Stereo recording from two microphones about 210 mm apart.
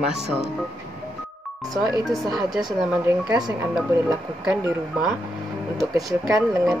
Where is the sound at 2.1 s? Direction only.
15° right (ahead or behind).